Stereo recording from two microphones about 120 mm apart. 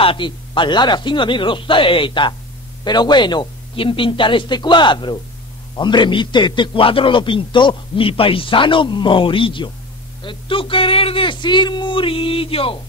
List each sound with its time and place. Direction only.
0.0 s a man's voice: 45° left (ahead or behind)